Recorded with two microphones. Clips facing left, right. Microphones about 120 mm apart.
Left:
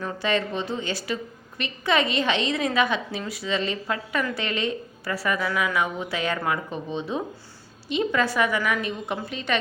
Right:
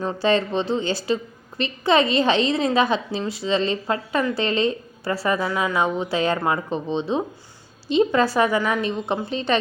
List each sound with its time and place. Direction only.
0.0 s a woman's voice: 30° right (ahead or behind)